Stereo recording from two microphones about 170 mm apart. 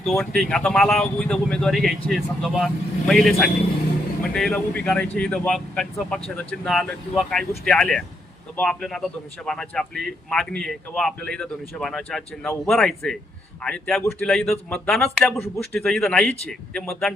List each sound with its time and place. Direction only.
0.0 s a man's voice: centre (ahead or behind)
15.3 s speech: 15° left (ahead or behind)
15.8 s a man's voice: centre (ahead or behind)